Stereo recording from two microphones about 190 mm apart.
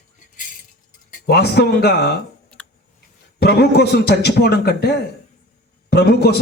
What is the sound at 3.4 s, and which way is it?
A man's voice, 60° left (ahead or behind).